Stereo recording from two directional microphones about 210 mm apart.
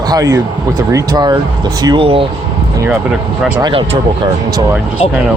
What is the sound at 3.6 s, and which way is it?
Speech, 25° right (ahead or behind).